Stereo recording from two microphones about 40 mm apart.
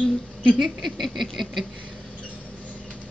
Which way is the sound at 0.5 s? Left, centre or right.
Centre.